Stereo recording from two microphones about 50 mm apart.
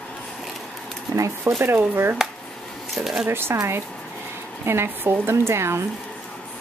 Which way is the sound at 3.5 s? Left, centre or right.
Right.